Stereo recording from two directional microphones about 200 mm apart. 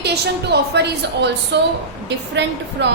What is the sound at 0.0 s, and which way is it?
A woman's voice, 55° right (ahead or behind).